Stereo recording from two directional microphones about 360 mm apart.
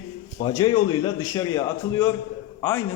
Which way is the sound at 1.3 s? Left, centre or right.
Centre.